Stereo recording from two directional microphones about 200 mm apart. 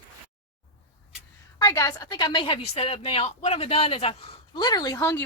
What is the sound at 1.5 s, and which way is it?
Speech, 20° left (ahead or behind).